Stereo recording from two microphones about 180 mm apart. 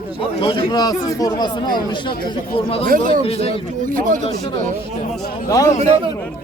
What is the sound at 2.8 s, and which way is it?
Speech, 50° right (ahead or behind).